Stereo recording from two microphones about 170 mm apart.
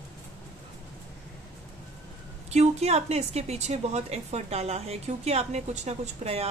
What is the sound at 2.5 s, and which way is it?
A woman's voice, 40° right (ahead or behind).